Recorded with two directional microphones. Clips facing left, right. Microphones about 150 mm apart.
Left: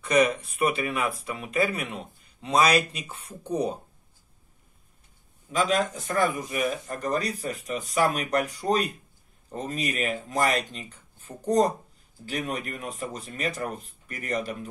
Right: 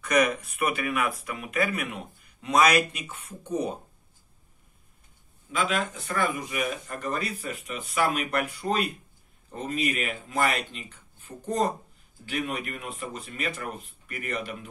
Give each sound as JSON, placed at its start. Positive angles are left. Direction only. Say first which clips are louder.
{"t": 0.0, "sound": "speech", "louder": "left 2 dB", "side_deg": 30}
{"t": 5.5, "sound": "speech", "louder": "left 3 dB", "side_deg": 40}